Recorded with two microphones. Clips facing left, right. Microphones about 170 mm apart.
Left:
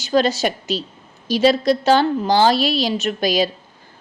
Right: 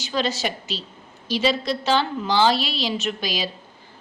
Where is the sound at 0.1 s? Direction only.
45° left (ahead or behind).